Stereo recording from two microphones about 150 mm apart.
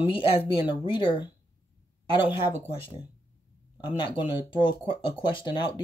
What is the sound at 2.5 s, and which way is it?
Speech, 15° right (ahead or behind).